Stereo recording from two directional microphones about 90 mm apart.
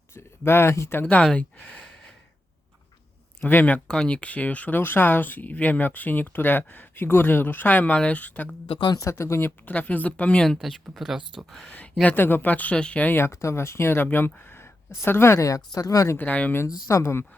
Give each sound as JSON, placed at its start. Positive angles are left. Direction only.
{"t": 0.1, "sound": "speech", "side_deg": 30}
{"t": 1.0, "sound": "speech", "side_deg": 10}
{"t": 3.4, "sound": "speech", "side_deg": 20}
{"t": 3.8, "sound": "speech", "side_deg": 10}
{"t": 8.6, "sound": "speech", "side_deg": 75}
{"t": 8.9, "sound": "speech", "side_deg": 35}
{"t": 12.0, "sound": "speech", "side_deg": 25}
{"t": 13.1, "sound": "speech", "side_deg": 30}
{"t": 16.1, "sound": "speech", "side_deg": 15}
{"t": 16.9, "sound": "speech", "side_deg": 30}